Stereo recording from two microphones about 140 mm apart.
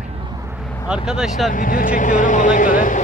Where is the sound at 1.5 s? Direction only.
75° left (ahead or behind).